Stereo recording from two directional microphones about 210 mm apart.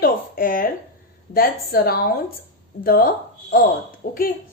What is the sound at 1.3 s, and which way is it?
A woman's voice, 45° left (ahead or behind).